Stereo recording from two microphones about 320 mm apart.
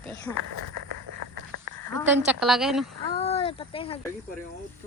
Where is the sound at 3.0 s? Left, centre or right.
Centre.